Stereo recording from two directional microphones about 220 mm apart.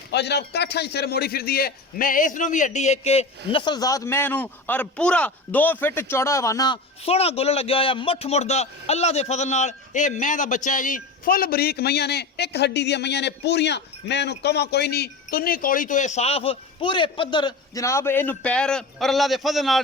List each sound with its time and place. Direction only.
0.1 s a man's voice: 50° left (ahead or behind); by 19.8 s centre (ahead or behind)